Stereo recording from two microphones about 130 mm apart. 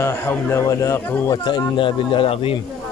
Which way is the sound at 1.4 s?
35° left (ahead or behind).